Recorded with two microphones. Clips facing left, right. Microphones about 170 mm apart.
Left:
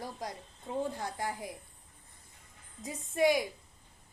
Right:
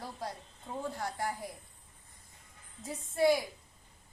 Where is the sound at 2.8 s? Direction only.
15° left (ahead or behind).